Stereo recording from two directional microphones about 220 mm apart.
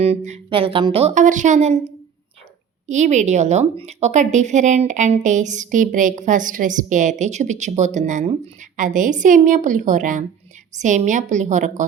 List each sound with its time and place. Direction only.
0.0 s a woman's voice: 30° right (ahead or behind)
2.9 s a woman's voice: 35° right (ahead or behind)